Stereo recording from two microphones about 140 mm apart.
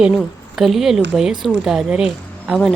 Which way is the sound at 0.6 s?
Centre (ahead or behind).